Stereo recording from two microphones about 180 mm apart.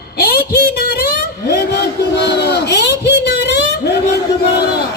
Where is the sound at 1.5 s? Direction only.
70° left (ahead or behind).